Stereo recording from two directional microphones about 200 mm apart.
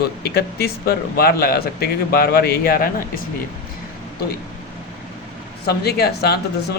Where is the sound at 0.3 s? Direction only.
55° left (ahead or behind).